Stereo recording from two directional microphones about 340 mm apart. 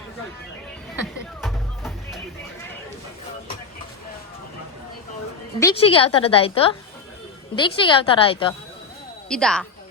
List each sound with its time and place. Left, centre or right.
1.4 s music: centre
5.5 s a woman's voice: centre
9.3 s speech: centre